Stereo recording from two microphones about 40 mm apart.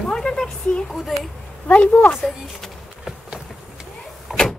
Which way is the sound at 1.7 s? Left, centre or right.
Left.